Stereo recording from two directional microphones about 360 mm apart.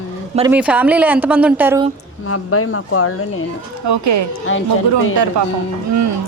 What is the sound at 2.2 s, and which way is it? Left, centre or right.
Speech, left.